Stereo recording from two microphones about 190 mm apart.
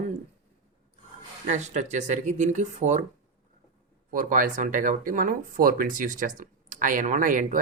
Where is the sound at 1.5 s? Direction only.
40° right (ahead or behind).